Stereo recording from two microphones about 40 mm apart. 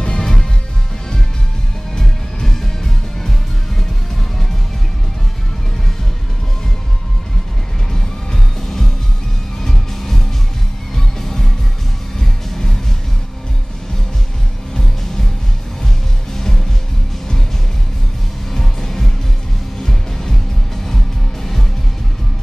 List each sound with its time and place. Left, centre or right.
0.0 s music: centre
2.0 s music: centre
9.6 s music: centre
16.3 s music: centre
18.5 s music: centre